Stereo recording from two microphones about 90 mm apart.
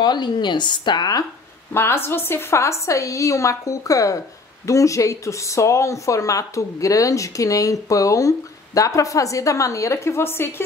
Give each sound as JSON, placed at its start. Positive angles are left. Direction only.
{"t": 0.0, "sound": "a woman's voice", "side_deg": 55}
{"t": 1.7, "sound": "speech", "side_deg": 25}